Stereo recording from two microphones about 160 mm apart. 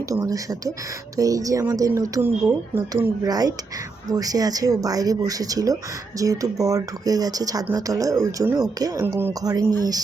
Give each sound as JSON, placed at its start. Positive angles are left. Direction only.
{"t": 0.1, "sound": "speech", "side_deg": -20}